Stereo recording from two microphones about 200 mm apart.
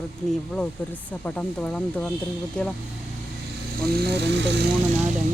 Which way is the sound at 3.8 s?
50° right (ahead or behind).